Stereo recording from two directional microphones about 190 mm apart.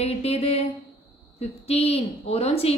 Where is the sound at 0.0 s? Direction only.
30° left (ahead or behind).